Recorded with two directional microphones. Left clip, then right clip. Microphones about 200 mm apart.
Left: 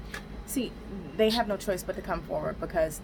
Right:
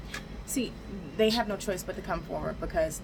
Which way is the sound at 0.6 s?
25° left (ahead or behind).